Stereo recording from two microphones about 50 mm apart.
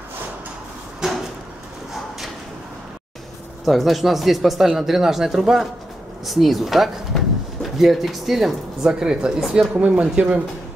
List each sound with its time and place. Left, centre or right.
1.0 s drawer open or close: centre
3.6 s speech: centre
9.0 s speech: centre